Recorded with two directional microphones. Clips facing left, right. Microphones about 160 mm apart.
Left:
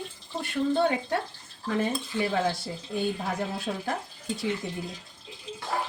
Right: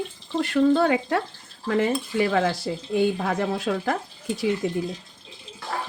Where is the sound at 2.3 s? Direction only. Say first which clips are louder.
Right 5 dB; 90° right.